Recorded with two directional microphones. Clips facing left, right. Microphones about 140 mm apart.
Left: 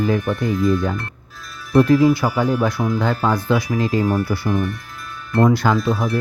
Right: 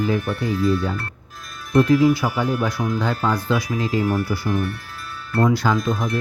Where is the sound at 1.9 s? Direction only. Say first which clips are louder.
Left 1 dB; 50° left (ahead or behind).